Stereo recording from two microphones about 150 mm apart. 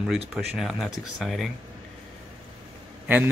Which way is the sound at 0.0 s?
Centre (ahead or behind).